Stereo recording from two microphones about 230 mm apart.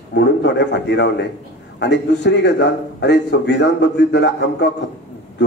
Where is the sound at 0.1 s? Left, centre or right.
Left.